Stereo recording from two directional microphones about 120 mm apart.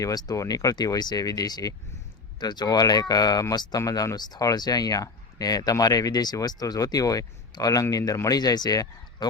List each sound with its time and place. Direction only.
0.0 s speech: 30° left (ahead or behind)